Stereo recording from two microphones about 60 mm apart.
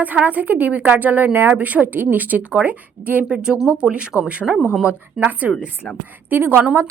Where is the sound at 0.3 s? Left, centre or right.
Right.